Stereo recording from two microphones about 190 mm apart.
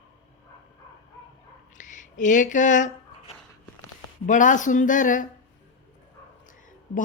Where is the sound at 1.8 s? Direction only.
40° left (ahead or behind).